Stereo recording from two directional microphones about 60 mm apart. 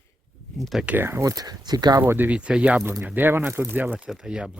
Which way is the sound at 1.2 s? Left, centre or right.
Right.